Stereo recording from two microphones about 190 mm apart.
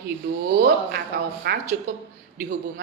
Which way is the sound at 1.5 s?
55° right (ahead or behind).